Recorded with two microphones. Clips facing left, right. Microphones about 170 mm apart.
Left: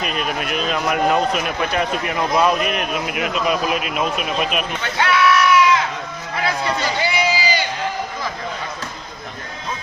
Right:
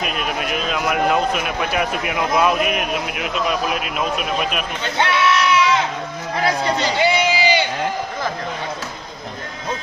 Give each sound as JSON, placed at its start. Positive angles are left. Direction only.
{"t": 0.0, "sound": "a man's voice", "side_deg": -5}
{"t": 4.9, "sound": "crowd", "side_deg": -25}
{"t": 6.4, "sound": "a man's voice", "side_deg": -35}